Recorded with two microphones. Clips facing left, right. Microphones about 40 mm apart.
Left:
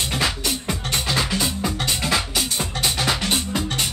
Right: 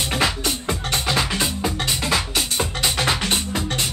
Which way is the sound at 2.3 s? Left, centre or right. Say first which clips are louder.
Right 1 dB; right.